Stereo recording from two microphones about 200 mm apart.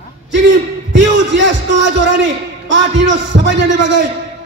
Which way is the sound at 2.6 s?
65° right (ahead or behind).